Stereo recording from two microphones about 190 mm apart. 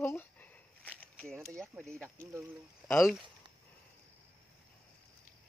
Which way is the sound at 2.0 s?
15° right (ahead or behind).